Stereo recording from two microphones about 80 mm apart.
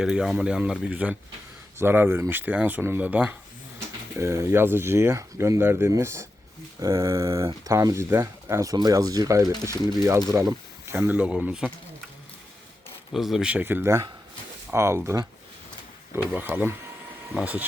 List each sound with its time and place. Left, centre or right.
0.0 s speech: centre
1.8 s speech: right
4.2 s speech: right
8.7 s speech: right
10.3 s speech: right
10.9 s speech: right
13.1 s speech: centre
13.5 s speech: right